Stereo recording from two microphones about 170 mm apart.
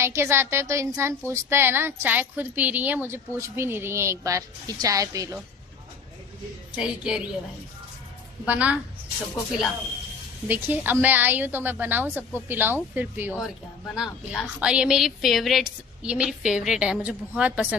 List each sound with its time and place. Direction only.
0.0 s a woman's voice: 15° right (ahead or behind)
6.7 s a woman's voice: 5° right (ahead or behind)
8.5 s a woman's voice: 10° right (ahead or behind)
10.5 s a woman's voice: 10° right (ahead or behind)